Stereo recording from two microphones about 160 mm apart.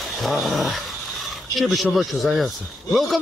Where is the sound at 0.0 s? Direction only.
Centre (ahead or behind).